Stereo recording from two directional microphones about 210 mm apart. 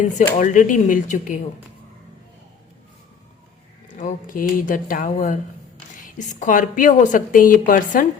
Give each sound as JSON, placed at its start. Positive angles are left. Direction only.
{"t": 0.0, "sound": "a woman's voice", "side_deg": 35}
{"t": 3.9, "sound": "a woman's voice", "side_deg": 40}